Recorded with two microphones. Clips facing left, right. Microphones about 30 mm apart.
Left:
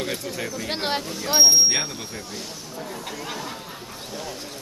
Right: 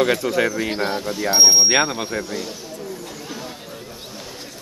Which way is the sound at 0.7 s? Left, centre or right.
Left.